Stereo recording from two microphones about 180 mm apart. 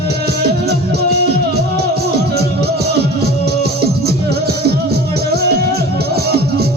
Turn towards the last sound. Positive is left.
turn(degrees=-60)  # may be behind; listen again after turning